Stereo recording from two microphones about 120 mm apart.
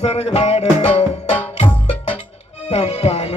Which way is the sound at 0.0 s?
65° left (ahead or behind).